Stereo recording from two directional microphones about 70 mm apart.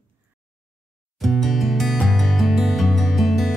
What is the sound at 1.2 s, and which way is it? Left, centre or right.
Music, centre.